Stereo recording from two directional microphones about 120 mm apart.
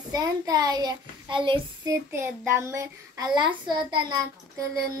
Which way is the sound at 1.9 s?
20° right (ahead or behind).